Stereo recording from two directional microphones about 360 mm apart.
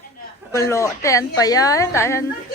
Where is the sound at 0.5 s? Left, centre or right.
Centre.